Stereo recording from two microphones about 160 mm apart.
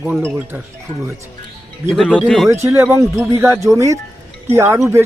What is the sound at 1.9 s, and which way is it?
Speech, 5° left (ahead or behind).